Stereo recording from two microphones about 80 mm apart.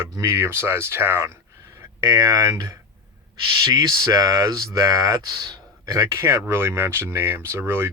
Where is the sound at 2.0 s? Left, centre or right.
Right.